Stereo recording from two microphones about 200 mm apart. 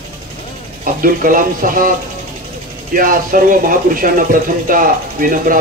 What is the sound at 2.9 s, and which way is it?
Speech, 45° right (ahead or behind).